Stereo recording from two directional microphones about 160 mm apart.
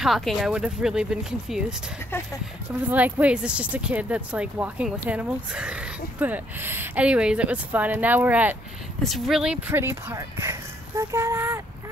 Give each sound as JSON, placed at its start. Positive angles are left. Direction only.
{"t": 0.0, "sound": "speech", "side_deg": 0}
{"t": 2.9, "sound": "speech", "side_deg": -10}